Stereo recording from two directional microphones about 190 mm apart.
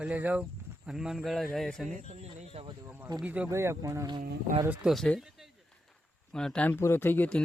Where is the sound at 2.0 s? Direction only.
35° right (ahead or behind).